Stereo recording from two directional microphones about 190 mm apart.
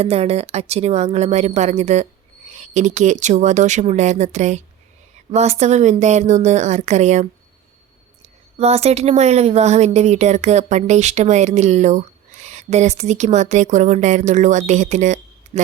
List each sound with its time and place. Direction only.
0.0 s speech: 30° right (ahead or behind)